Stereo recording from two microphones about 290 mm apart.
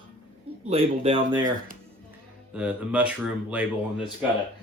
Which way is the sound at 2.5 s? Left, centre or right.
Centre.